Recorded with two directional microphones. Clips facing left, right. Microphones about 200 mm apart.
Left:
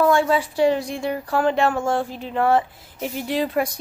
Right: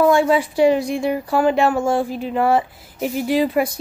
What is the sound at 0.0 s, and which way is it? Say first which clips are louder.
A woman's voice: right 3 dB; 15° right (ahead or behind).